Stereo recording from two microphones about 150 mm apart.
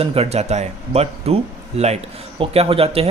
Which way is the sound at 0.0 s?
40° right (ahead or behind).